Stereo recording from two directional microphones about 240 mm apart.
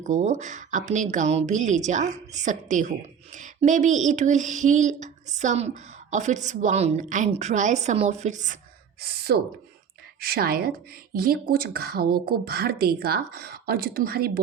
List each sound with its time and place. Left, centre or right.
0.0 s speech: right
9.0 s speech: right